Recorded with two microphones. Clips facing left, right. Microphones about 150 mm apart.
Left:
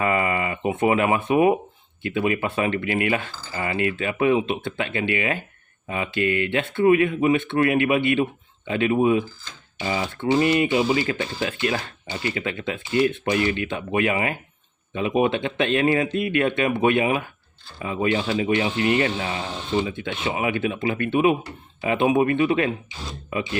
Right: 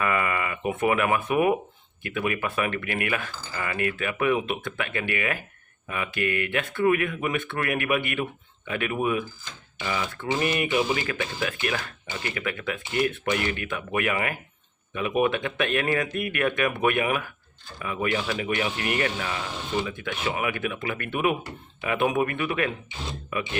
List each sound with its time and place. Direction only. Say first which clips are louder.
0.0 s speech: left 4 dB; 25° left (ahead or behind)